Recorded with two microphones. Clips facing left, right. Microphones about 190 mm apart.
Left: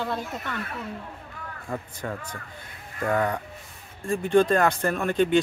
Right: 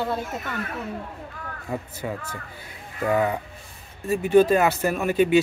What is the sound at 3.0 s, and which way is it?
Speech, 5° right (ahead or behind).